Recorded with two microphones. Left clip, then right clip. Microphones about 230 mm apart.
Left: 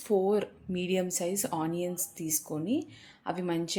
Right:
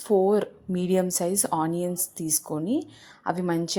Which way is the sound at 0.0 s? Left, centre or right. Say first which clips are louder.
Right 6 dB; right.